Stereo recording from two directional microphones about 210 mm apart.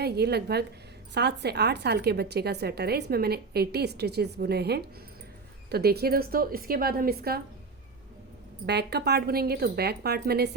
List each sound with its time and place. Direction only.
0.0 s a woman's voice: 50° right (ahead or behind)
8.6 s a woman's voice: 50° right (ahead or behind)